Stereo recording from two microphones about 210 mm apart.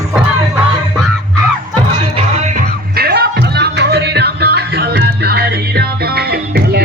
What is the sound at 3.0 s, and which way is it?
Music, 50° right (ahead or behind).